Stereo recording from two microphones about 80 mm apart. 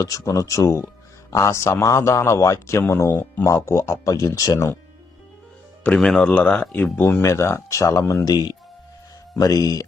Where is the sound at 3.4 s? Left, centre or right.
Left.